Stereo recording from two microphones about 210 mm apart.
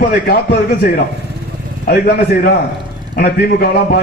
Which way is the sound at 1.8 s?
45° left (ahead or behind).